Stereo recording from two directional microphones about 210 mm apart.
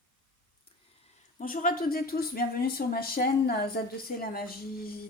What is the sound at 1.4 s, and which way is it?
Speech, 40° left (ahead or behind).